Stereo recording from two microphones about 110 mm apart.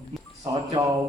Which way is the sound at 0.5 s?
35° right (ahead or behind).